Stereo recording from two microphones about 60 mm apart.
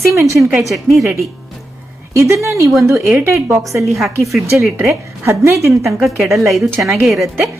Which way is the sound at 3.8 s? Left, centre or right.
Right.